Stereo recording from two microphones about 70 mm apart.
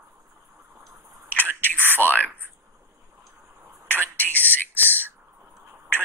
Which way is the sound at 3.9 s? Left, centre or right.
Left.